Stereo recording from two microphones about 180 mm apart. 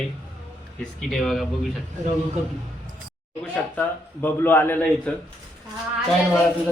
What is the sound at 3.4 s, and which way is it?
A man's voice, 10° left (ahead or behind).